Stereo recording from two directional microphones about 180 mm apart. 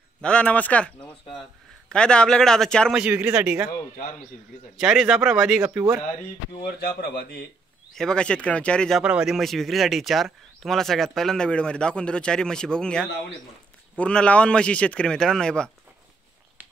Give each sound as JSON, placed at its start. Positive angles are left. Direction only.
{"t": 0.2, "sound": "a man's voice", "side_deg": 5}
{"t": 4.7, "sound": "speech", "side_deg": 0}
{"t": 6.6, "sound": "speech", "side_deg": 60}
{"t": 7.9, "sound": "speech", "side_deg": 5}